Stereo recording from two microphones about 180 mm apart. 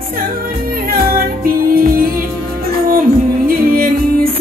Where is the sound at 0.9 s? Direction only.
55° right (ahead or behind).